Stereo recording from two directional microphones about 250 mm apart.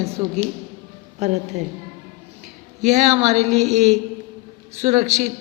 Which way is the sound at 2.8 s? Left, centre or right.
Right.